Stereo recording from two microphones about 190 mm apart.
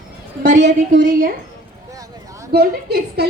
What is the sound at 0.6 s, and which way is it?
Speech, 45° right (ahead or behind).